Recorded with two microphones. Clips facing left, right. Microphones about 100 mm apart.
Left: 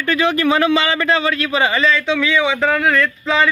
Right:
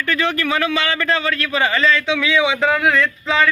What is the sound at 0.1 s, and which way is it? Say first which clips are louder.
Speech: left 5 dB; 20° left (ahead or behind).